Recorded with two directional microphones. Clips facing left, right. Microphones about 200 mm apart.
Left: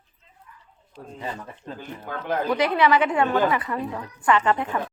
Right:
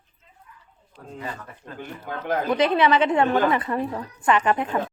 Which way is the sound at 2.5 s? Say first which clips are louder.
Right 1 dB; 20° right (ahead or behind).